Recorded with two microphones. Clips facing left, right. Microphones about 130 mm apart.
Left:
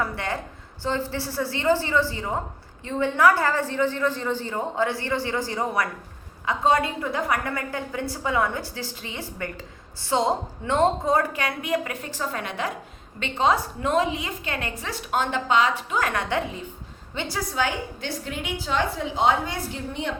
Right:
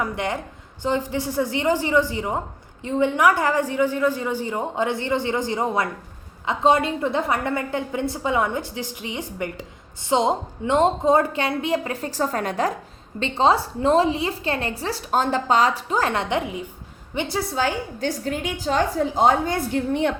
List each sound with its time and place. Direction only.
0.0 s a woman's voice: 20° right (ahead or behind); by 20.1 s 60° right (ahead or behind)